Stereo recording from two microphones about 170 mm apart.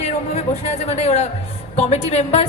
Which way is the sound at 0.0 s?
40° left (ahead or behind).